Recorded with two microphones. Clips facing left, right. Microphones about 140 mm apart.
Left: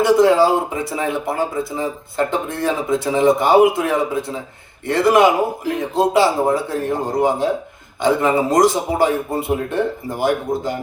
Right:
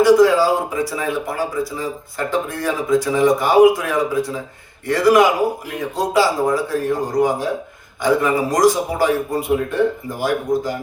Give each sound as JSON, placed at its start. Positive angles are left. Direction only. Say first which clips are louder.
{"t": 0.0, "sound": "speech", "louder": "right 1 dB", "side_deg": 25}